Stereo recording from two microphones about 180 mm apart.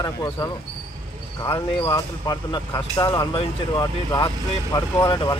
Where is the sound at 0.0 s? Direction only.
20° left (ahead or behind).